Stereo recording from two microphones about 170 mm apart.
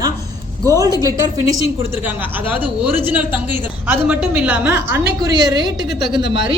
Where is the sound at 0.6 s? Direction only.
20° right (ahead or behind).